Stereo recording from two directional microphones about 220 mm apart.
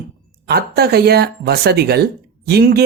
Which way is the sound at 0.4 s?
45° right (ahead or behind).